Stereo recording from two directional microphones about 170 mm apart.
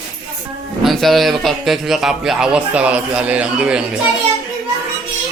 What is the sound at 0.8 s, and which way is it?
A man's voice, centre (ahead or behind).